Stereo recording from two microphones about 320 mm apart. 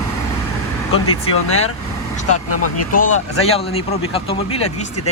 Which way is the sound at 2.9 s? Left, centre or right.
Left.